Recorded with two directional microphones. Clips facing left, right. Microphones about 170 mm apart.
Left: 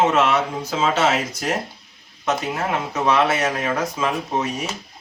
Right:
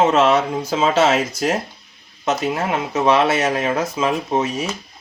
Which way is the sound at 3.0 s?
30° right (ahead or behind).